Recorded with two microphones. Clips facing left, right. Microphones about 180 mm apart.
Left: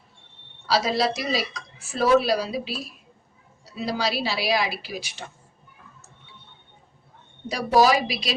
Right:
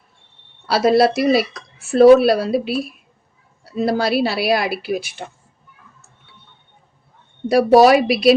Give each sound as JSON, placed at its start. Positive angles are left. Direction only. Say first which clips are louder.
{"t": 0.7, "sound": "a woman's voice", "louder": "right 9 dB", "side_deg": -60}
{"t": 7.4, "sound": "a woman's voice", "louder": "right 8 dB", "side_deg": -60}